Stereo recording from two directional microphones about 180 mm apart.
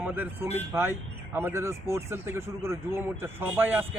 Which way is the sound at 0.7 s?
10° right (ahead or behind).